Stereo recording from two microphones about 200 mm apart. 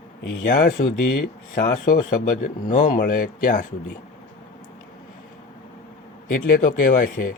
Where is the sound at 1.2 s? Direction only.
50° left (ahead or behind).